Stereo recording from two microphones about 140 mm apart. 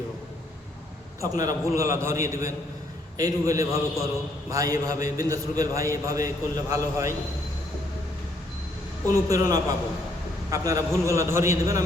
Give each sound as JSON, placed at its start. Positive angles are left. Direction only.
{"t": 1.2, "sound": "a man's voice", "side_deg": -25}
{"t": 9.3, "sound": "a man's voice", "side_deg": -25}